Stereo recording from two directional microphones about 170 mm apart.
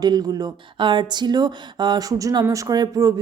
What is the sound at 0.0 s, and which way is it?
Speech, 25° right (ahead or behind).